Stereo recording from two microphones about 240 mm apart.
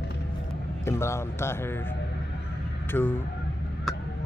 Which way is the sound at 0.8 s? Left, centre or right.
Centre.